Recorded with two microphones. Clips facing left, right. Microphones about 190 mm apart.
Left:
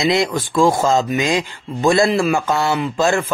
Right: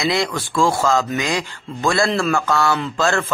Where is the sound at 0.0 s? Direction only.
20° left (ahead or behind).